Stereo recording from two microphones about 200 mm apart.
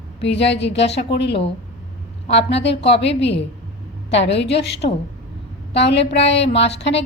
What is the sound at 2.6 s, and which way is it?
A woman's voice, 60° left (ahead or behind).